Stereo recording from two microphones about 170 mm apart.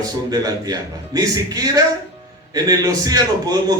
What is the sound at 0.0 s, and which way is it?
A man's voice, 20° right (ahead or behind).